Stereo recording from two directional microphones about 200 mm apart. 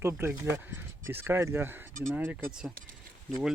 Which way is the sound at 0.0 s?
10° right (ahead or behind).